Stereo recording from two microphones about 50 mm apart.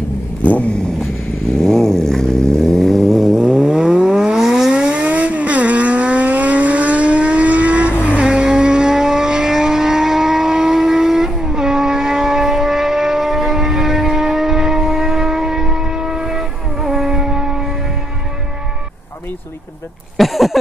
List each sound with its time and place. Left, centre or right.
0.4 s vehicle: left
1.6 s a sound: centre
3.4 s vehicle: centre
5.0 s vehicle: right
8.2 s vehicle: centre
20.2 s a sound: centre